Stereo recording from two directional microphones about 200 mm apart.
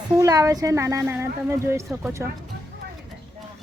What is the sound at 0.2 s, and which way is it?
Speech, 15° right (ahead or behind).